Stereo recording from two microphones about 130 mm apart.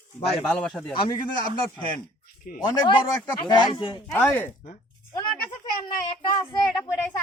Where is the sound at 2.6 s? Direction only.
35° left (ahead or behind).